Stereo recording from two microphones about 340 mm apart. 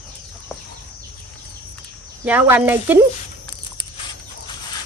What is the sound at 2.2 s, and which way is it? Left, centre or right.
Speech, centre.